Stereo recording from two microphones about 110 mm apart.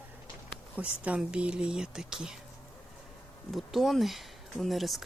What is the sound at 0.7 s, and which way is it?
Speech, 10° right (ahead or behind).